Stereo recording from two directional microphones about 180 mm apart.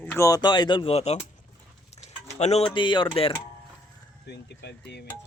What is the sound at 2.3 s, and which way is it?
Music, 35° left (ahead or behind).